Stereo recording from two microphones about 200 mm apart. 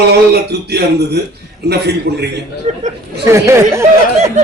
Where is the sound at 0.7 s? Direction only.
55° right (ahead or behind).